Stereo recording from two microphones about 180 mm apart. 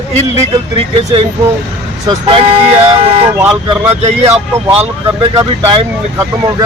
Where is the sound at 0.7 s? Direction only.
30° right (ahead or behind).